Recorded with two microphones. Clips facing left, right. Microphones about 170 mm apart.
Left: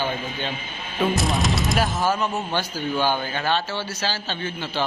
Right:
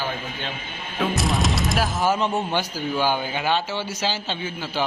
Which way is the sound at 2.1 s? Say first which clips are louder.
Right 2 dB; 25° right (ahead or behind).